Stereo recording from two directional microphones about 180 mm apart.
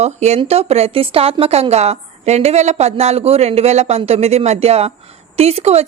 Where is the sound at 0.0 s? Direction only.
35° right (ahead or behind).